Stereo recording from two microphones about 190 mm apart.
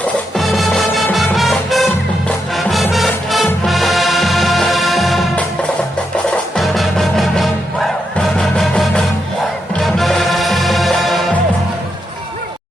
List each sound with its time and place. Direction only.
0.0 s music: centre (ahead or behind)
6.3 s music: centre (ahead or behind)